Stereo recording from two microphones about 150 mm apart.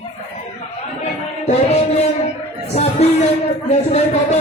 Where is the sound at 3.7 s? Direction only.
45° left (ahead or behind).